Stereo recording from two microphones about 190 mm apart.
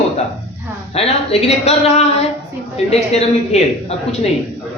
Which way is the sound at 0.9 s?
30° left (ahead or behind).